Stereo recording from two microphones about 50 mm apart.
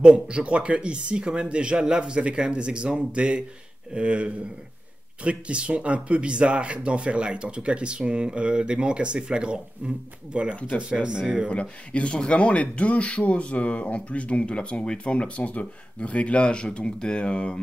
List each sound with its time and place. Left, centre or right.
0.0 s speech: right
11.4 s speech: left